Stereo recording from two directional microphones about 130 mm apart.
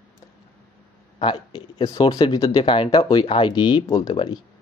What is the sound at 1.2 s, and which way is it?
Speech, 35° left (ahead or behind).